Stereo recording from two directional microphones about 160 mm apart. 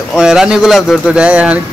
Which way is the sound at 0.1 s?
5° right (ahead or behind).